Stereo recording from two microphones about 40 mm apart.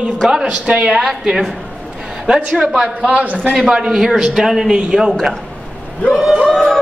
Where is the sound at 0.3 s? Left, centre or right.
Centre.